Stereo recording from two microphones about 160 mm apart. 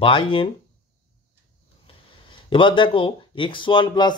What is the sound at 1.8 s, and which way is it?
Speech, 35° left (ahead or behind).